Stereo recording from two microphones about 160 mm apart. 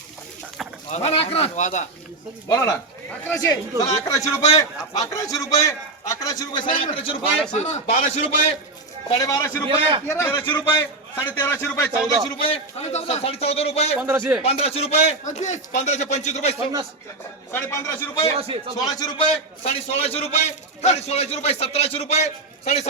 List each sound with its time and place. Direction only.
0.9 s a man's voice: 45° left (ahead or behind)
2.5 s a man's voice: 20° left (ahead or behind)
7.5 s a man's voice: 45° left (ahead or behind)
9.0 s a man's voice: 20° left (ahead or behind)
9.6 s a man's voice: 35° right (ahead or behind)
10.1 s a man's voice: 15° left (ahead or behind)
12.4 s a man's voice: 40° left (ahead or behind)
14.0 s speech: 10° right (ahead or behind)
14.4 s a man's voice: 40° left (ahead or behind)
17.5 s a man's voice: 15° left (ahead or behind)
18.3 s a man's voice: 35° right (ahead or behind)
18.8 s a man's voice: 25° left (ahead or behind); by 22.9 s 45° left (ahead or behind)